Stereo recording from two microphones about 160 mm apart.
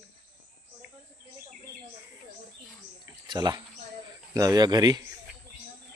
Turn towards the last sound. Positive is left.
turn(degrees=-25)  # may be behind; listen again after turning